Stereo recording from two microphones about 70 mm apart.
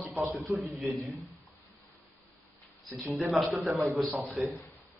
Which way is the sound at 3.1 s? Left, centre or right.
Centre.